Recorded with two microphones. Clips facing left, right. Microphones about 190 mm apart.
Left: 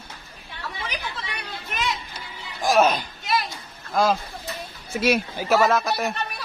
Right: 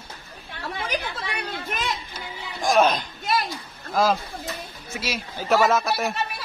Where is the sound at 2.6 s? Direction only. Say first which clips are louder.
Even; 5° left (ahead or behind).